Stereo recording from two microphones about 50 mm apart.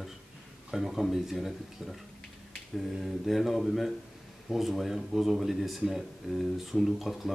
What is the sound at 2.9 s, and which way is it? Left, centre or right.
Speech, centre.